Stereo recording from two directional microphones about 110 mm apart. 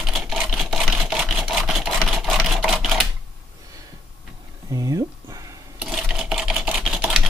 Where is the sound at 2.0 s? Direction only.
Centre (ahead or behind).